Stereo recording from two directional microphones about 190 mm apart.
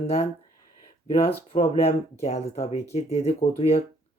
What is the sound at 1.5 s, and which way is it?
Speech, 30° left (ahead or behind).